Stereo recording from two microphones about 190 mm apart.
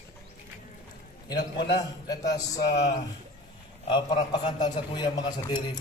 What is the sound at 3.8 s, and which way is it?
A man's voice, 25° left (ahead or behind).